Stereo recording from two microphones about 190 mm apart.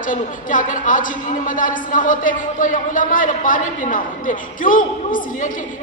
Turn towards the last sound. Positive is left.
turn(degrees=45)  # may be behind; listen again after turning